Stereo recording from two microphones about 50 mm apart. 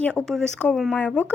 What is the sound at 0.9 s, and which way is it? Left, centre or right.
Speech, left.